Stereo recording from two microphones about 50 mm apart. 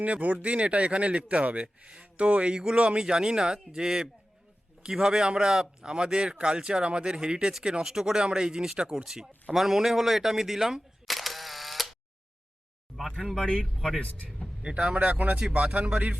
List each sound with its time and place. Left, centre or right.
0.0 s speech: right
9.0 s speech: centre
13.1 s speech: centre
13.7 s speech: centre
14.0 s speech: left
14.6 s speech: right